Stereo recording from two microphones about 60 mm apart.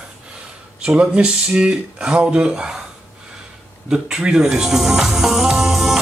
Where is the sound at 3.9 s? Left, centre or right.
Centre.